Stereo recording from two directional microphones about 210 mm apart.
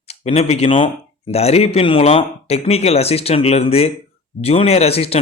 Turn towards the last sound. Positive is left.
turn(degrees=30)  # may be behind; listen again after turning